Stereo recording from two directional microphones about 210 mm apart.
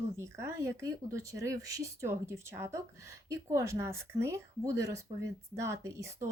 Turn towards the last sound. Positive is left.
turn(degrees=-15)  # may be behind; listen again after turning